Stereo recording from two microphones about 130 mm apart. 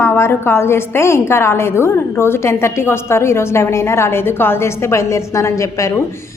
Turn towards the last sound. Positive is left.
turn(degrees=25)  # may be behind; listen again after turning